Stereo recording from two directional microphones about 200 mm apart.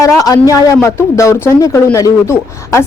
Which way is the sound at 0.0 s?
15° left (ahead or behind).